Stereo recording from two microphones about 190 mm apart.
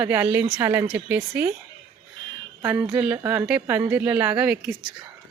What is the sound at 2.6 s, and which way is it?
Speech, 10° right (ahead or behind).